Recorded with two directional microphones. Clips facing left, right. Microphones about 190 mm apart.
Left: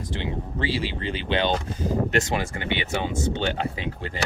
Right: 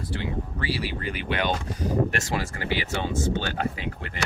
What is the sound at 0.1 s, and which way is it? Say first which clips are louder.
Speech: left 1 dB; 20° left (ahead or behind).